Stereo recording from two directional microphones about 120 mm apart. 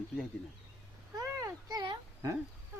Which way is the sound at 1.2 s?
25° right (ahead or behind).